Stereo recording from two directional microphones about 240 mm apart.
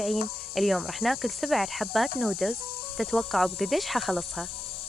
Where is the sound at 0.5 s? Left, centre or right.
Centre.